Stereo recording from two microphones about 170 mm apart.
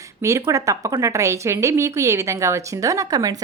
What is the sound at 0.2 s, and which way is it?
Speech, 15° right (ahead or behind).